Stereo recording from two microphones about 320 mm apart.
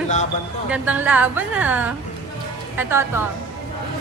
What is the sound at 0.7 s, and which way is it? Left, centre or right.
A woman's voice, centre.